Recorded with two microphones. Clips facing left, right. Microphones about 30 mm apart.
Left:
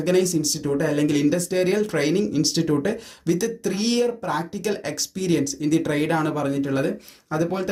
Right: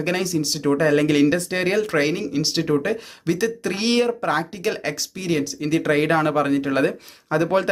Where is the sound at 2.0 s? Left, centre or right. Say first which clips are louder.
Even; centre; by 3.5 s right.